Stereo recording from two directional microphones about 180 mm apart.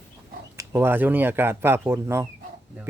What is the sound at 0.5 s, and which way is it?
Speech, 15° right (ahead or behind).